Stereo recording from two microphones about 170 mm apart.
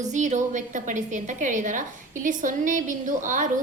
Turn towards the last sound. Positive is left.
turn(degrees=-50)  # may be behind; listen again after turning